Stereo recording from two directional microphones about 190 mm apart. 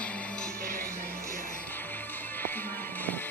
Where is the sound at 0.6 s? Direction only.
50° right (ahead or behind).